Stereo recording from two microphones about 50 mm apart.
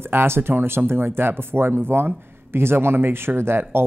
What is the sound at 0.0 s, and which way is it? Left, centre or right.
Speech, right.